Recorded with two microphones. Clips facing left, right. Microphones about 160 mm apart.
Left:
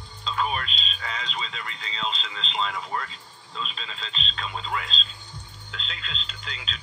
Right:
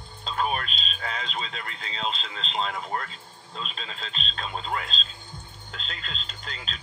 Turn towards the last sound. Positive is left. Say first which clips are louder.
# even
turn(degrees=-45)  # may be behind; listen again after turning